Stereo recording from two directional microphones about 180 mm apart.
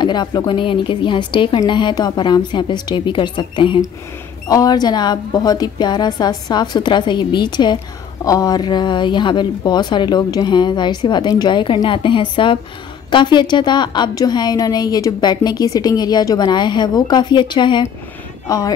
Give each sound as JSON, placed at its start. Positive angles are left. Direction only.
{"t": 0.0, "sound": "a woman's voice", "side_deg": 25}